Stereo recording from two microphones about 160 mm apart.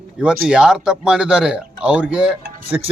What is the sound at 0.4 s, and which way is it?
A man's voice, 5° right (ahead or behind).